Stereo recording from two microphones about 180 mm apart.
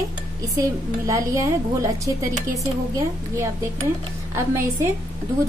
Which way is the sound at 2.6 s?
15° right (ahead or behind).